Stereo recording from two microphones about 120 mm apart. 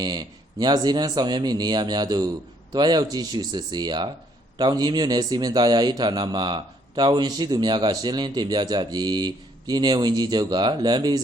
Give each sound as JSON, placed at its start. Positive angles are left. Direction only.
{"t": 0.0, "sound": "a man's voice", "side_deg": -35}